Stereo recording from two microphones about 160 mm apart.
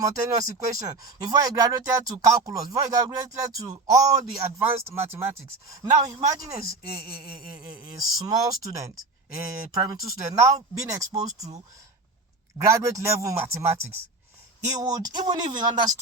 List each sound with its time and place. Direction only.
0.5 s speech: 20° right (ahead or behind)
12.5 s speech: 20° right (ahead or behind)